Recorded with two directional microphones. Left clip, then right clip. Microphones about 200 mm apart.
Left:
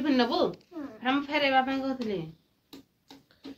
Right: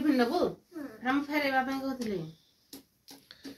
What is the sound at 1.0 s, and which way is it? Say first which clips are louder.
Speech: left 3 dB; 35° right (ahead or behind).